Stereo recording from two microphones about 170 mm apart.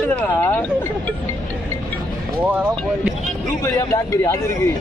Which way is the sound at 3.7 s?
20° left (ahead or behind).